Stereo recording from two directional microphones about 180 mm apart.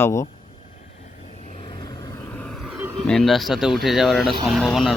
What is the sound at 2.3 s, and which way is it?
Vehicle, 5° left (ahead or behind).